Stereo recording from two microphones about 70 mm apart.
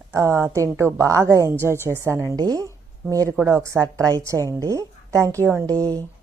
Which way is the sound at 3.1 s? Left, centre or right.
Right.